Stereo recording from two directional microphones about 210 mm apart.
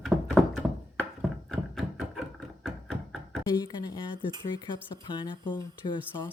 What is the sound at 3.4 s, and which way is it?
Speech, 20° left (ahead or behind).